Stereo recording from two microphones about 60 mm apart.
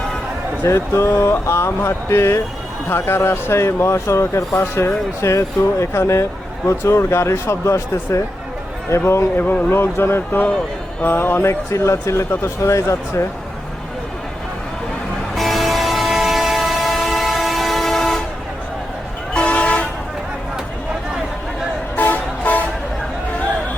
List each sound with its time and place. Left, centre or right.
0.6 s speech: left
9.4 s speech: left
11.7 s speech: left
15.4 s train: centre
19.3 s toot: centre
21.9 s toot: left